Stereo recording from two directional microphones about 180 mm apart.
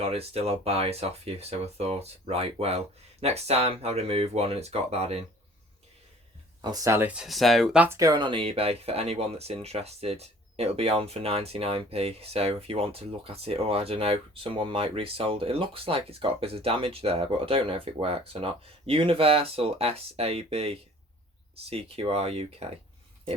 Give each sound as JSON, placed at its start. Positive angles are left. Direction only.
{"t": 0.0, "sound": "speech", "side_deg": -35}
{"t": 6.6, "sound": "speech", "side_deg": -20}